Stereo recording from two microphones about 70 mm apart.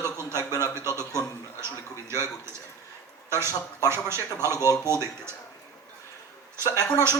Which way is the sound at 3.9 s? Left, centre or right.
Right.